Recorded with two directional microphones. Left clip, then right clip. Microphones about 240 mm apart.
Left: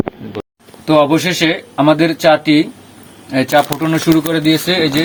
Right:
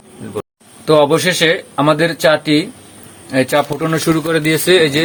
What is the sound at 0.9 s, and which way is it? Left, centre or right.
Speech, centre.